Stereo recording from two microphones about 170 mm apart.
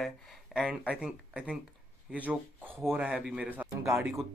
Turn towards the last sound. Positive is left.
turn(degrees=-5)  # may be behind; listen again after turning